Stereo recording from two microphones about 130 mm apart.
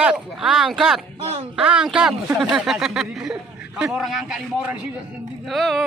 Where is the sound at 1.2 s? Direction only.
50° right (ahead or behind).